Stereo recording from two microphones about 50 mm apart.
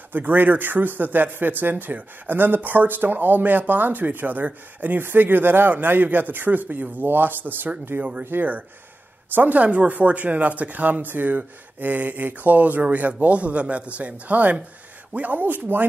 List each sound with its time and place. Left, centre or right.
0.1 s speech: right